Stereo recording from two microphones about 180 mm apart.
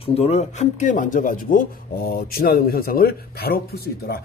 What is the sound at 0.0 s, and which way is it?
A man's voice, 35° left (ahead or behind).